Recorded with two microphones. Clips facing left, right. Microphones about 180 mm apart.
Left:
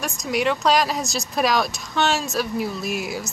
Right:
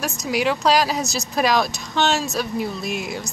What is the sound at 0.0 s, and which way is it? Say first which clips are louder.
Speech: right 1 dB; centre (ahead or behind).